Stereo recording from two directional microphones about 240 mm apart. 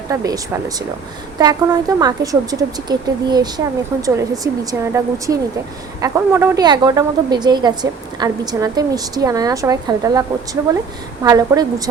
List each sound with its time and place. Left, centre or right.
0.1 s a woman's voice: centre